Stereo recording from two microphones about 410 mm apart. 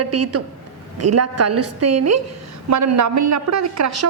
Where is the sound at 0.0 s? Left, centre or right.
Right.